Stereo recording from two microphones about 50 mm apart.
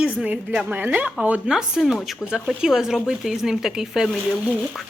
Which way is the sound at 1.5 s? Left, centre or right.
Centre.